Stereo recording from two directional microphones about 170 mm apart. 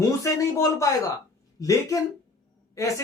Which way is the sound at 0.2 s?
20° left (ahead or behind).